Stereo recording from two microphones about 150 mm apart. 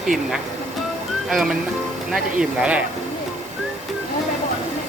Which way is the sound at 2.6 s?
10° right (ahead or behind).